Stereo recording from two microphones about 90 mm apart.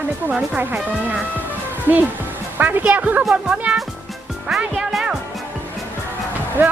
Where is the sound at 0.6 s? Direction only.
20° right (ahead or behind).